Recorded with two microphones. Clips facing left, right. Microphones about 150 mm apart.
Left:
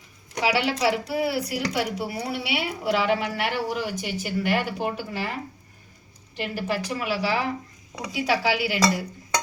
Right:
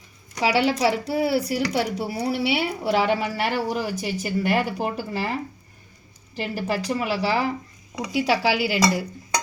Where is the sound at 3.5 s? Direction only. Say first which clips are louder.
Right 2 dB; 40° right (ahead or behind).